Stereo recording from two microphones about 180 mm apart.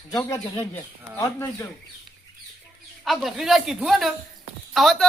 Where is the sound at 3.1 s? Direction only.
Centre (ahead or behind).